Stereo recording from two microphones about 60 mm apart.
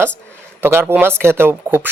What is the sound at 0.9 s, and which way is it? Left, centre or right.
Speech, right.